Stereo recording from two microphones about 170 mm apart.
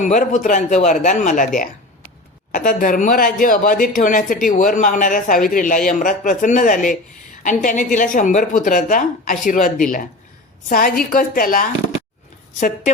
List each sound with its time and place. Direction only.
0.0 s a woman's voice: 45° left (ahead or behind)
12.5 s speech: 45° left (ahead or behind)